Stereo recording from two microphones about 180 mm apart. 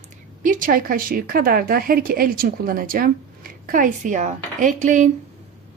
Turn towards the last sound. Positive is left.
turn(degrees=-45)  # may be behind; listen again after turning